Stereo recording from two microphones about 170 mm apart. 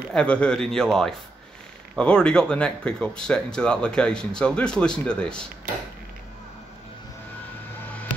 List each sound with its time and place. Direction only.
0.1 s speech: 5° left (ahead or behind)